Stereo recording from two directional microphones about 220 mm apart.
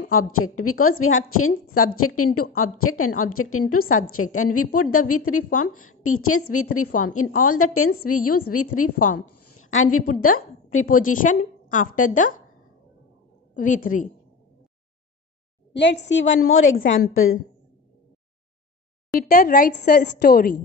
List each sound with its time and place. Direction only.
0.1 s a woman's voice: 75° left (ahead or behind)
8.1 s a woman's voice: 90° left
8.9 s a woman's voice: 35° left (ahead or behind)
9.3 s a sound: 90° left
10.2 s a woman's voice: 75° left (ahead or behind)
11.2 s a woman's voice: 35° left (ahead or behind)
13.6 s a woman's voice: 35° left (ahead or behind)
15.7 s a woman's voice: 50° left (ahead or behind); by 17.4 s 70° left (ahead or behind)
19.2 s a woman's voice: 40° left (ahead or behind)